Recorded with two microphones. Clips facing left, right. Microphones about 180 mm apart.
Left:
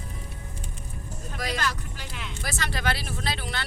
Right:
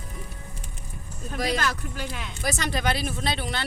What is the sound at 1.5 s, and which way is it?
Speech, 50° right (ahead or behind).